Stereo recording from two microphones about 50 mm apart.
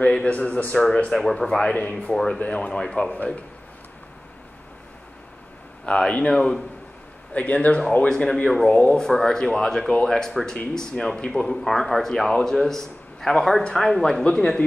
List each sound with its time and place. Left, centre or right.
0.0 s speech: left
1.2 s a man's voice: centre
1.6 s a man's voice: centre
5.9 s a man's voice: centre
7.3 s speech: left
8.1 s a man's voice: centre